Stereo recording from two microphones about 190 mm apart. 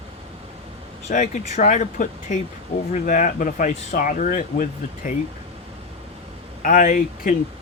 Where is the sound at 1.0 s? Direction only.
40° left (ahead or behind).